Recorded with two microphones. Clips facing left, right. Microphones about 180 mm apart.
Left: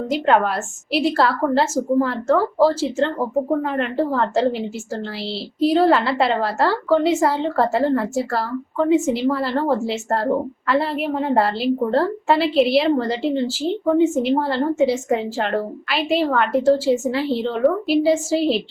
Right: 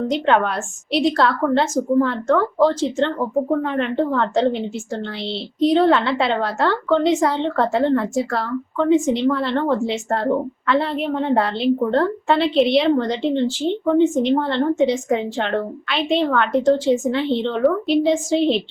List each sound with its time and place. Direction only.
0.1 s a woman's voice: 5° left (ahead or behind)